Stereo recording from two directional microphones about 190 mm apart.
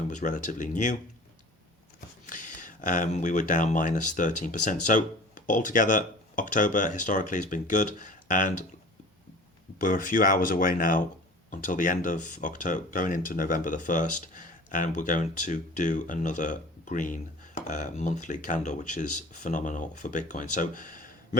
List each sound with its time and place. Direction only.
0.1 s speech: 40° left (ahead or behind)
2.2 s speech: 45° left (ahead or behind)
9.8 s speech: 45° left (ahead or behind)